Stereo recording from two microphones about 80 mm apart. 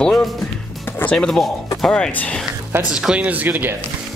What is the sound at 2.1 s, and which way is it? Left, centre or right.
Speech, centre.